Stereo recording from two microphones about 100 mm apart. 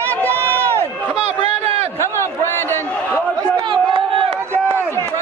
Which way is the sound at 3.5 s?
50° right (ahead or behind).